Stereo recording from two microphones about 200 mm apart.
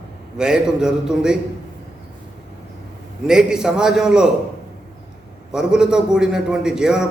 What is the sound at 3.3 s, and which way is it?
A man's voice, 5° right (ahead or behind).